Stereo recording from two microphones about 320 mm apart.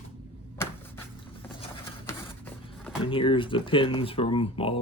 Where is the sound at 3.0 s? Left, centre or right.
Centre.